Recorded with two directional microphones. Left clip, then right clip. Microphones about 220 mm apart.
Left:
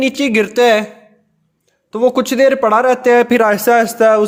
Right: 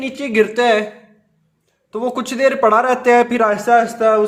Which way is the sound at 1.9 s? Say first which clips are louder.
Left 8 dB; 35° left (ahead or behind).